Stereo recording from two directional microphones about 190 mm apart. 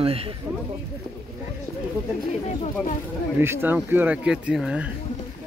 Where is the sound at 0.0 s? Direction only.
30° right (ahead or behind).